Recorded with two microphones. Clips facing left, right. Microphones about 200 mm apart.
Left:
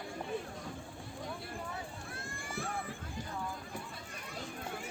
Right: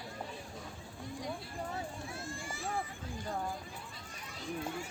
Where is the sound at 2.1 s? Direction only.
55° left (ahead or behind).